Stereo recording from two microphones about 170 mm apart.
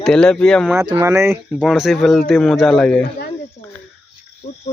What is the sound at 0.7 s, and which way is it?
Speech, 15° right (ahead or behind).